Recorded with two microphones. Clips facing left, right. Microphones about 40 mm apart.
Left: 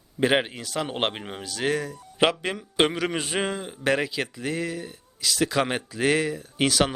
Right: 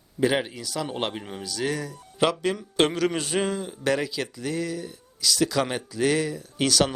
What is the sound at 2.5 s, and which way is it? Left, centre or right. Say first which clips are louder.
A man's voice: even; centre.